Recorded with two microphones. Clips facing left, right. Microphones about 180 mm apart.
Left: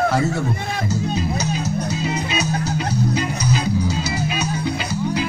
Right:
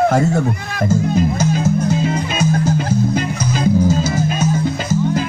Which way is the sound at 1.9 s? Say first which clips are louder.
Right 5 dB; 50° right (ahead or behind).